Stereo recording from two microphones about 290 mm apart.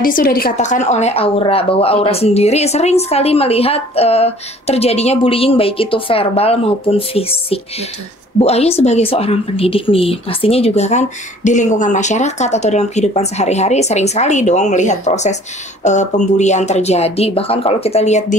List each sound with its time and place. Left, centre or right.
0.0 s speech: left